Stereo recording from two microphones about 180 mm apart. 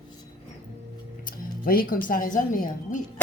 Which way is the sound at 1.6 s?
50° left (ahead or behind).